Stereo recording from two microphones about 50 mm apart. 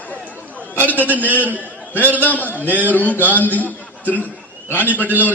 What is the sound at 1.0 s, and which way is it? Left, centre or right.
Speech, right.